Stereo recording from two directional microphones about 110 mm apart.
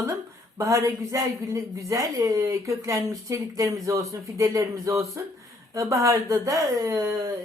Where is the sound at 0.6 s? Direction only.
30° right (ahead or behind).